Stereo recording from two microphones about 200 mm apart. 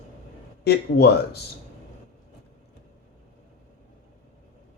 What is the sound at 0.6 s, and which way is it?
Speech, 55° left (ahead or behind).